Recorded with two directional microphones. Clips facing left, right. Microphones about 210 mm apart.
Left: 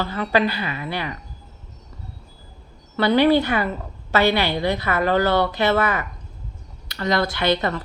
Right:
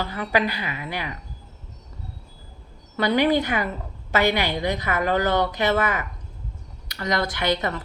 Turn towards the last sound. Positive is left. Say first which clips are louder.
# left 3 dB
turn(degrees=-15)  # may be behind; listen again after turning